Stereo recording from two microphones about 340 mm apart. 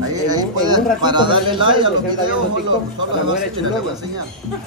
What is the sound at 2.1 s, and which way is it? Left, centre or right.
Speech, right.